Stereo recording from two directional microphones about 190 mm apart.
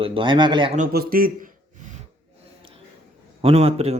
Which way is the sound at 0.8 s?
50° right (ahead or behind).